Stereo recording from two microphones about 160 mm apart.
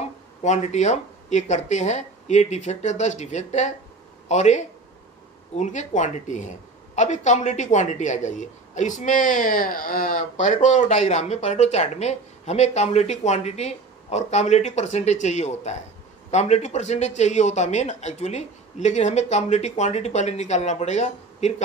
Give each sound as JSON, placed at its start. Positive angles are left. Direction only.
{"t": 0.4, "sound": "speech", "side_deg": 45}